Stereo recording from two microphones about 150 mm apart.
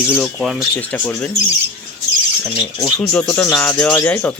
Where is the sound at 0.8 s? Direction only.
10° left (ahead or behind).